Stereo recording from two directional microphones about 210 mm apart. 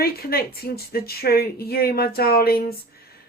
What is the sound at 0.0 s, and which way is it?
Speech, 45° left (ahead or behind).